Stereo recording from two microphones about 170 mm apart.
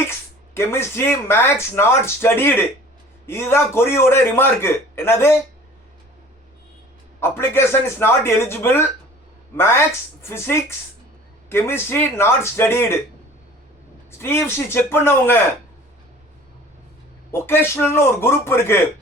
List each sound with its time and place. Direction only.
0.5 s speech: 15° left (ahead or behind)
7.2 s speech: 15° left (ahead or behind)
14.2 s speech: 15° left (ahead or behind)
17.3 s speech: 15° left (ahead or behind)